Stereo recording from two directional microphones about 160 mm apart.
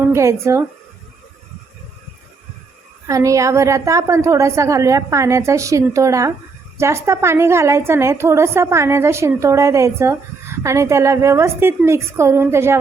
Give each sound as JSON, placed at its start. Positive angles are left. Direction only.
{"t": 0.0, "sound": "speech", "side_deg": -15}
{"t": 3.1, "sound": "a woman's voice", "side_deg": -20}